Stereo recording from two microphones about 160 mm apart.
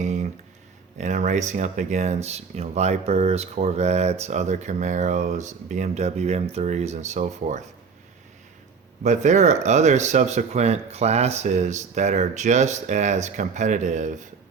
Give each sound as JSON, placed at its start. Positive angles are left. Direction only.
{"t": 0.0, "sound": "a sound", "side_deg": -50}
{"t": 0.9, "sound": "speech", "side_deg": -45}
{"t": 9.0, "sound": "speech", "side_deg": -45}